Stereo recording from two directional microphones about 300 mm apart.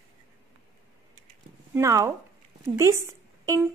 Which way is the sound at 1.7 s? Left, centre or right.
Centre.